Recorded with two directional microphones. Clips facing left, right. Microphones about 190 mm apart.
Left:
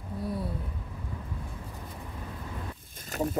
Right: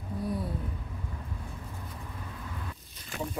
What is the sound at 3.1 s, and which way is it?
Speech, 40° left (ahead or behind).